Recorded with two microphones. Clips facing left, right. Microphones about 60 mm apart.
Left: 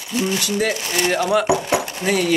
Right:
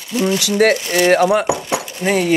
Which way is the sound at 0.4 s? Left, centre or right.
Right.